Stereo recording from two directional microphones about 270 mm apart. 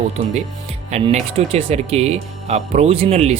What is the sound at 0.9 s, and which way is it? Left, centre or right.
Speech, right.